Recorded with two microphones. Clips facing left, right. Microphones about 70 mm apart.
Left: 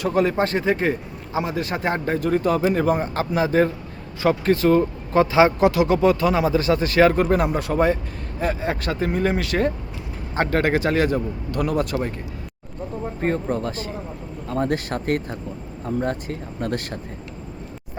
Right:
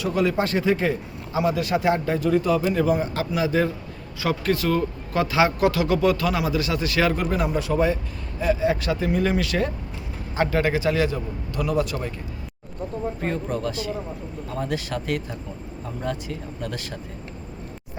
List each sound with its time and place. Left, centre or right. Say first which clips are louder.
0.0 s a man's voice: left 2 dB; left
13.2 s a man's voice: left 6 dB; left